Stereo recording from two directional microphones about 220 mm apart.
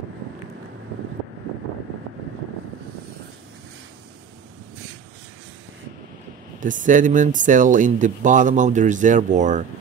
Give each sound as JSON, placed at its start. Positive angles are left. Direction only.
{"t": 6.6, "sound": "speech", "side_deg": -35}